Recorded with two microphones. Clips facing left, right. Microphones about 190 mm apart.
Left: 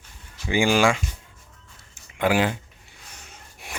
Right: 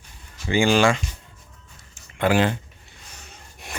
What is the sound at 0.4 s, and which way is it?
Speech, 10° left (ahead or behind).